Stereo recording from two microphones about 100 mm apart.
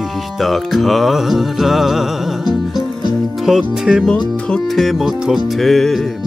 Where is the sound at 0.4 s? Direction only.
Centre (ahead or behind).